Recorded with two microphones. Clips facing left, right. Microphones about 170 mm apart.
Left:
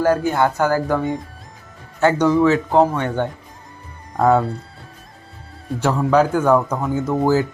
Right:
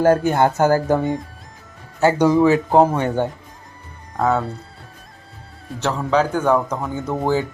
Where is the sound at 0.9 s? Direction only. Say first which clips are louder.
Right 2 dB; 20° right (ahead or behind).